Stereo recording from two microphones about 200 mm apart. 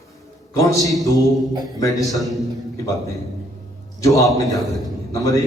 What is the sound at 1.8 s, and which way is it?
Speech, 15° left (ahead or behind).